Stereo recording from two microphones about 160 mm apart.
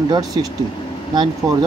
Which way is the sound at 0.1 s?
25° right (ahead or behind).